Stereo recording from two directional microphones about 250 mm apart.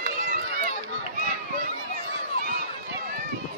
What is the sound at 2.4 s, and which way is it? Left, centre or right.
Run, right.